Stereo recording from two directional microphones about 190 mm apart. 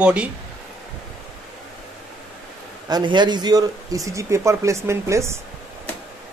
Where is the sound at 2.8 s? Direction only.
20° right (ahead or behind).